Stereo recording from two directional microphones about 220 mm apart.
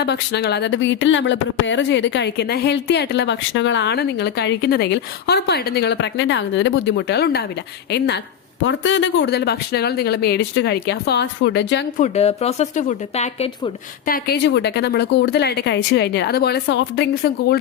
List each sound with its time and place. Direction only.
0.0 s speech: 50° left (ahead or behind)
11.9 s speech: 30° left (ahead or behind)
14.1 s speech: 50° left (ahead or behind)